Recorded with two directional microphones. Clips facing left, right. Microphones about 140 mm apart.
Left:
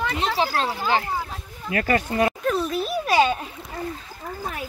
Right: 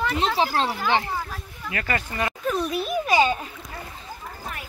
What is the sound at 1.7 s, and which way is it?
Speech, 45° left (ahead or behind).